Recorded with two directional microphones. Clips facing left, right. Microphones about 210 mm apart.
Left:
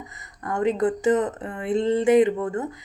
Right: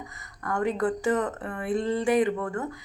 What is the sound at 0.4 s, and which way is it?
Speech, 20° left (ahead or behind).